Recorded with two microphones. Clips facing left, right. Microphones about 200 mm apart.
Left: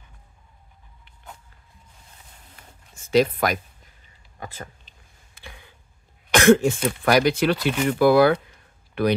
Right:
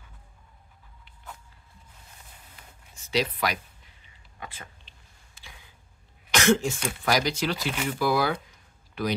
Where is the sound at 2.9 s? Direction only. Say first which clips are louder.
Left 9 dB; 50° left (ahead or behind).